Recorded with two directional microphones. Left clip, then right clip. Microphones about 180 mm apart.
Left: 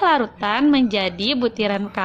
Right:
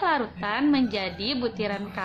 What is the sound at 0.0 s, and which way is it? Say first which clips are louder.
A woman's voice: left 7 dB; 40° left (ahead or behind).